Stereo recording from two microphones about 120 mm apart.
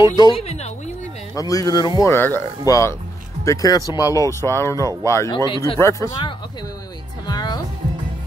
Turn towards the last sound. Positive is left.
turn(degrees=35)  # may be behind; listen again after turning